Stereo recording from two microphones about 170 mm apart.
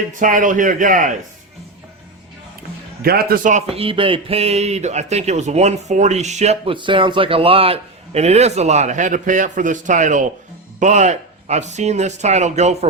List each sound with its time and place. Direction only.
0.2 s speech: 50° right (ahead or behind)
3.0 s a man's voice: 65° right (ahead or behind)
3.7 s speech: 35° right (ahead or behind)